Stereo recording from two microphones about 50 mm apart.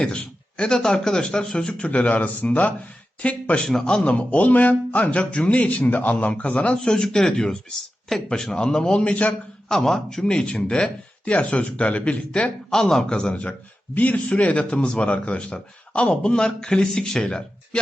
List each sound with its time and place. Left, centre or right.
0.0 s a sound: left
0.8 s speech: centre
2.0 s speech: left
3.7 s speech: centre
4.0 s speech: left
6.8 s speech: centre
9.6 s speech: centre; by 12.5 s left
12.7 s speech: centre
13.1 s speech: left